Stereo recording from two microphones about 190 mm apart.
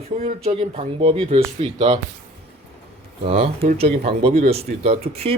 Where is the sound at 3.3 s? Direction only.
30° right (ahead or behind).